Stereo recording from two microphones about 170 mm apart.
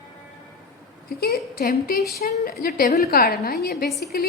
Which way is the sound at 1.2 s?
65° left (ahead or behind).